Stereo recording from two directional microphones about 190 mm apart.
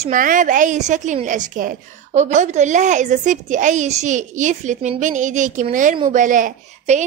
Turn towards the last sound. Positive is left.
turn(degrees=-45)  # may be behind; listen again after turning